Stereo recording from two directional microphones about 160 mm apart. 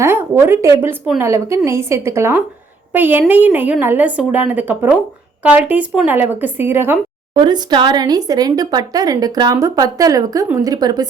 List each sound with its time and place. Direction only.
0.0 s a woman's voice: 15° right (ahead or behind)
7.3 s speech: 25° right (ahead or behind)